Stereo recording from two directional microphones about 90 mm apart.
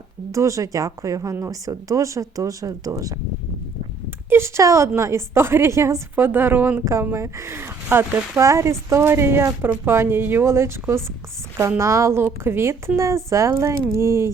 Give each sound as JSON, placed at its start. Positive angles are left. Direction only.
{"t": 0.3, "sound": "a woman's voice", "side_deg": -35}
{"t": 4.3, "sound": "a woman's voice", "side_deg": -30}